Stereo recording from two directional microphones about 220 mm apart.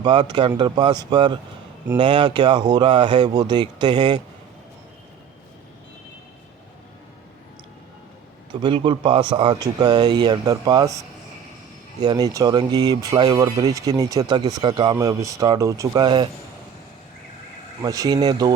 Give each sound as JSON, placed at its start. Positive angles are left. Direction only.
{"t": 0.0, "sound": "speech", "side_deg": -20}
{"t": 8.6, "sound": "speech", "side_deg": -25}
{"t": 12.0, "sound": "speech", "side_deg": -15}
{"t": 17.8, "sound": "speech", "side_deg": -15}